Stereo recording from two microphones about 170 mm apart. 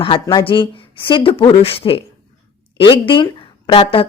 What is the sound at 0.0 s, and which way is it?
A woman's voice, 30° left (ahead or behind).